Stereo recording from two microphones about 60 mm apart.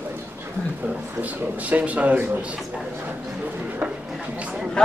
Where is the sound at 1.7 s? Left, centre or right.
Right.